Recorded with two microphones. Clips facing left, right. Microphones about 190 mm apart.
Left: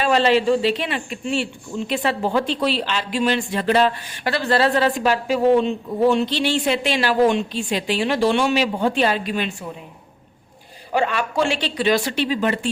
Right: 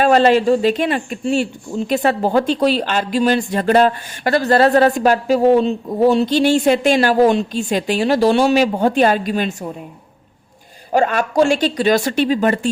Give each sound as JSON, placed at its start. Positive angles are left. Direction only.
{"t": 0.0, "sound": "speech", "side_deg": -50}
{"t": 10.9, "sound": "speech", "side_deg": -45}